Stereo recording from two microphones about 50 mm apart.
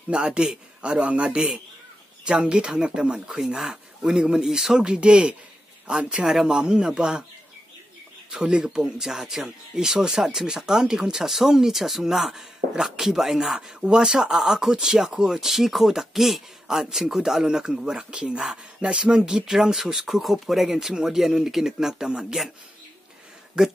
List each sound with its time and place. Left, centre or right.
0.1 s a man's voice: centre
4.8 s a man's voice: right
8.3 s speech: centre
16.6 s speech: centre
23.6 s speech: centre